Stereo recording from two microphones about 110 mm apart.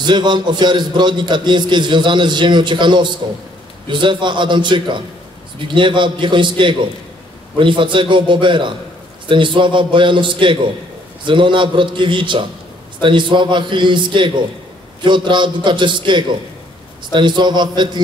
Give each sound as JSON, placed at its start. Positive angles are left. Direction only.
{"t": 0.0, "sound": "a man's voice", "side_deg": -45}